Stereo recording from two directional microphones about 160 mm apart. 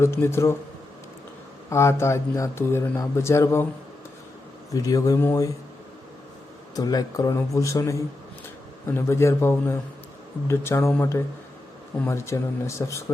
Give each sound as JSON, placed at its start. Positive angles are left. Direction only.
{"t": 0.0, "sound": "speech", "side_deg": 15}
{"t": 1.7, "sound": "speech", "side_deg": 15}
{"t": 4.7, "sound": "speech", "side_deg": 20}
{"t": 6.7, "sound": "speech", "side_deg": 25}